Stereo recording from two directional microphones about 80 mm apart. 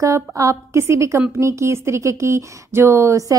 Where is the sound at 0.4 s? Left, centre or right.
Right.